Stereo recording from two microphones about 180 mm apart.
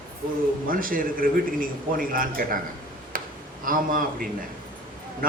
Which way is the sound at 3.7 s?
50° right (ahead or behind).